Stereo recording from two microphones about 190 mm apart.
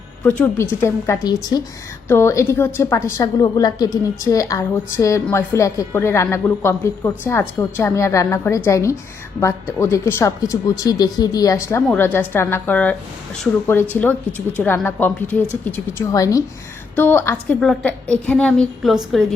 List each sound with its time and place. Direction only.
0.3 s a woman's voice: 10° left (ahead or behind)